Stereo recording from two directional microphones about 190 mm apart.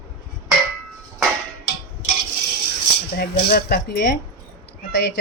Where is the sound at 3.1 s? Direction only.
55° left (ahead or behind).